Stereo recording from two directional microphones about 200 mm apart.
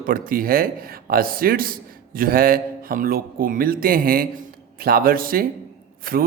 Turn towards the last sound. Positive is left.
turn(degrees=-45)  # may be behind; listen again after turning